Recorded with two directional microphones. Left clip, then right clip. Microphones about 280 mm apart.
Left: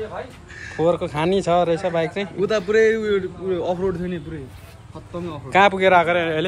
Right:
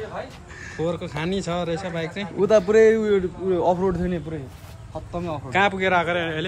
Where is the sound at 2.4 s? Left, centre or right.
Right.